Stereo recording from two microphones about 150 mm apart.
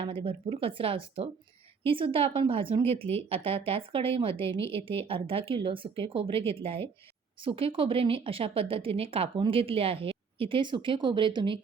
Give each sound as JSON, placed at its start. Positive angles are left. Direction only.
{"t": 0.0, "sound": "a woman's voice", "side_deg": -35}